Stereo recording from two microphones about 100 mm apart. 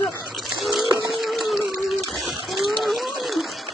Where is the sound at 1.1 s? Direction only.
Centre (ahead or behind).